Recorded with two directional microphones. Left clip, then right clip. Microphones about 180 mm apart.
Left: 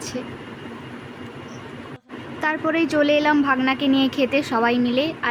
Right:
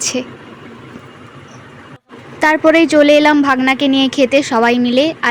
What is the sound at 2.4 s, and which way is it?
A woman's voice, 30° right (ahead or behind).